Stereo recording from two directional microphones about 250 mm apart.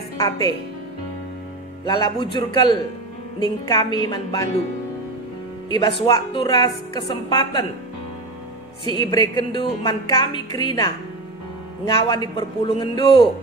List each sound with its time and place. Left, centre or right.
1.9 s a man's voice: centre
5.7 s a woman's voice: centre
8.9 s a woman's voice: centre